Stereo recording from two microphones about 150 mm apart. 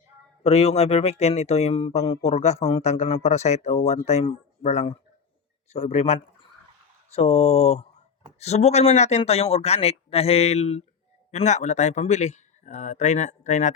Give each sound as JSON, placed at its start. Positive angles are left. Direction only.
{"t": 0.4, "sound": "speech", "side_deg": 45}